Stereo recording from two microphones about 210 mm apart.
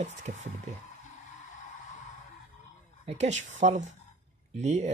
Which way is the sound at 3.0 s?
35° right (ahead or behind).